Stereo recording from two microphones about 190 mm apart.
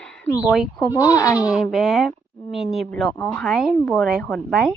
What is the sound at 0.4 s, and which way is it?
Speech, centre (ahead or behind).